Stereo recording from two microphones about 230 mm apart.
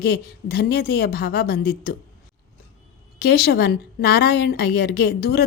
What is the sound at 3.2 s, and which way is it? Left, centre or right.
A woman's voice, left.